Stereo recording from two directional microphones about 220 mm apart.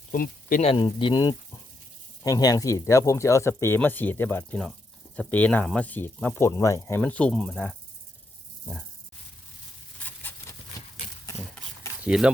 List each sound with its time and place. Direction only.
0.1 s speech: 40° left (ahead or behind)
0.7 s speech: 20° left (ahead or behind); by 7.8 s 5° left (ahead or behind)
10.0 s a sound: 10° left (ahead or behind)
12.0 s speech: 5° right (ahead or behind)